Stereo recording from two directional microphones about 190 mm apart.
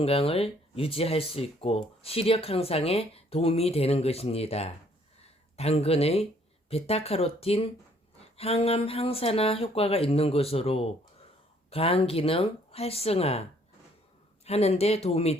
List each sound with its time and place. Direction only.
0.0 s speech: 30° left (ahead or behind)
14.4 s speech: 35° left (ahead or behind)